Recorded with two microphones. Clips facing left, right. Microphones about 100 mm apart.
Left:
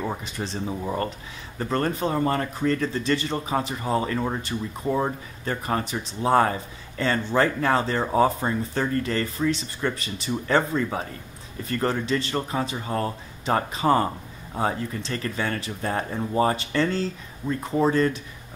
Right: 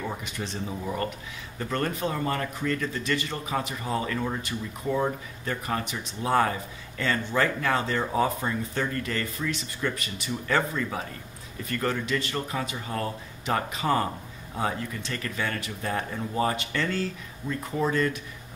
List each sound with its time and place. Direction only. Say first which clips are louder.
0.4 s speech: left 3 dB; 35° left (ahead or behind)
1.6 s speech: left 4 dB; 35° left (ahead or behind)